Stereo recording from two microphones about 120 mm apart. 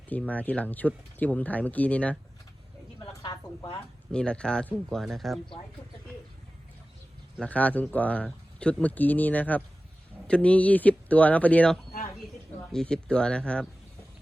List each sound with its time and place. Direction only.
0.1 s speech: 10° left (ahead or behind)
3.2 s a woman's voice: 30° left (ahead or behind)
4.1 s speech: 10° left (ahead or behind)
7.3 s speech: 10° left (ahead or behind)